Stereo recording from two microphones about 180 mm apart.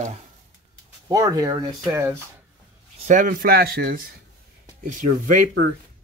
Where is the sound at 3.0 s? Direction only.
45° right (ahead or behind).